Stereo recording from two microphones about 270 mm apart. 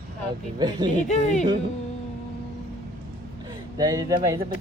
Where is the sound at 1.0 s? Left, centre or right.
Left.